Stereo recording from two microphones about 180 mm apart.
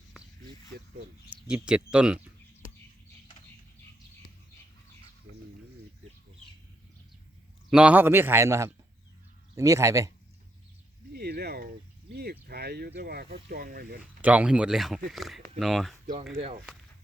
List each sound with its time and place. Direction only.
1.5 s speech: 5° right (ahead or behind)
7.7 s a man's voice: 5° right (ahead or behind)
11.1 s a sound: 60° right (ahead or behind)
13.5 s speech: 55° right (ahead or behind)
14.2 s speech: 10° right (ahead or behind)